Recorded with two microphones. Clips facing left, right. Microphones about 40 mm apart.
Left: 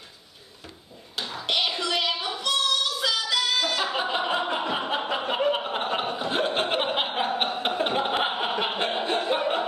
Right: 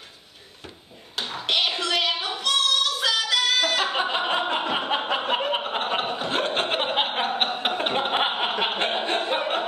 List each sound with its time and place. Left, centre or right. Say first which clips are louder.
1.1 s a sound: right 2 dB; right
2.5 s singing: right 3 dB; right
5.1 s chuckle: left 2 dB; right
5.8 s chuckle: right 1 dB; right
6.4 s chuckle: left 2 dB; centre; by 8.7 s right
8.7 s a sound: right 1 dB; right